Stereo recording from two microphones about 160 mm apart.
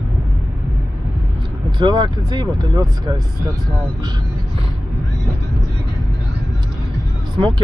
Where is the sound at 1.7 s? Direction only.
25° right (ahead or behind).